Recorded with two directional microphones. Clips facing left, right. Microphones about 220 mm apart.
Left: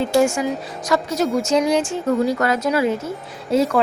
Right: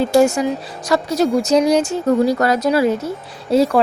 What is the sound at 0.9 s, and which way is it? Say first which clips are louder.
Speech: right 3 dB; 35° right (ahead or behind).